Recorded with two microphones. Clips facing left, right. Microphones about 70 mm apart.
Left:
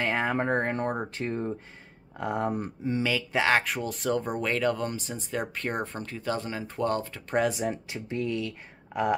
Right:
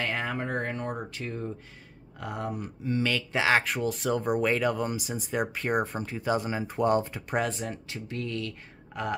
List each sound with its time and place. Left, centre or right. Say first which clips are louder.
0.0 s speech: left 4 dB; left
3.0 s speech: left 1 dB; centre
7.3 s speech: left 3 dB; centre
7.7 s speech: left 3 dB; left